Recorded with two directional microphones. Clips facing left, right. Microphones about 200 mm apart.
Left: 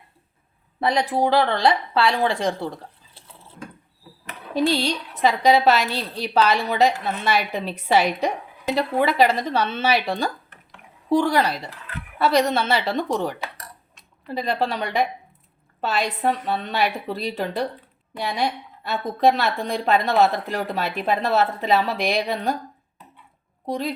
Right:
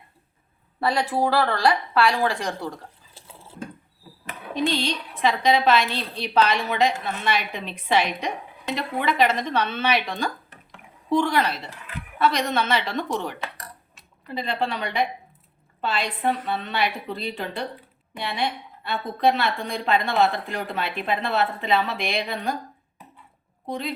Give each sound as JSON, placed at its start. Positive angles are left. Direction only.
{"t": 0.8, "sound": "a woman's voice", "side_deg": 20}
{"t": 5.1, "sound": "speech", "side_deg": 40}
{"t": 14.3, "sound": "a woman's voice", "side_deg": 40}
{"t": 23.6, "sound": "a woman's voice", "side_deg": 40}